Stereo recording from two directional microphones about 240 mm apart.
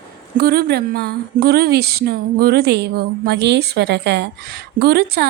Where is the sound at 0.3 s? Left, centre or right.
Right.